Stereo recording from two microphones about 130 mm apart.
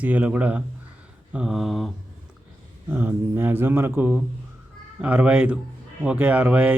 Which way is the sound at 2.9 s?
15° right (ahead or behind).